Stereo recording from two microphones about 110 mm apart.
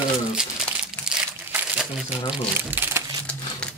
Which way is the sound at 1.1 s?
5° right (ahead or behind).